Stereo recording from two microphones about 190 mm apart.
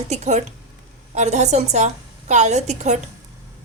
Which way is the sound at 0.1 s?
35° right (ahead or behind).